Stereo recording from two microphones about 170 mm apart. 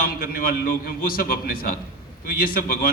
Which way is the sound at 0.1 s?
55° left (ahead or behind).